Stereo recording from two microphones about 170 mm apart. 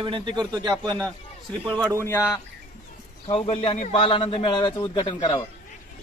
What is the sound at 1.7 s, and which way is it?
Speech, 5° left (ahead or behind).